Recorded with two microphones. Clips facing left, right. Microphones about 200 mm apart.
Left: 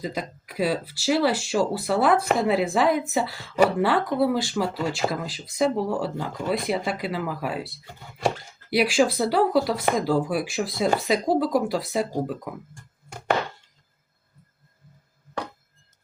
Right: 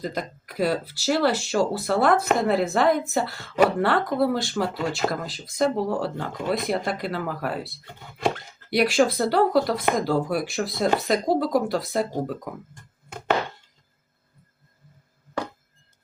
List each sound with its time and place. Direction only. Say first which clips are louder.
0.0 s a woman's voice: right 1 dB; centre (ahead or behind)
8.7 s a woman's voice: right 1 dB; 5° left (ahead or behind)